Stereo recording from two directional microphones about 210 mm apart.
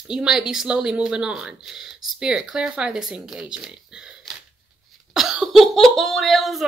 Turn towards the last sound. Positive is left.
turn(degrees=0)  # may be behind; listen again after turning